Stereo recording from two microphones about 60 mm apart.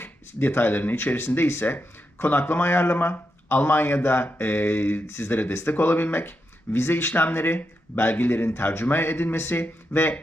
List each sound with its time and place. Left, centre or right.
0.0 s speech: left